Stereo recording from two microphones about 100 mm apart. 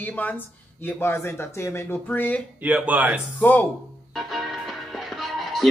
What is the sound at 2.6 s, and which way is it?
Speech, 15° right (ahead or behind).